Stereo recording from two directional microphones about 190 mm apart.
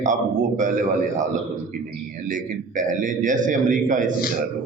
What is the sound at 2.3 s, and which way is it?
Speech, 45° right (ahead or behind).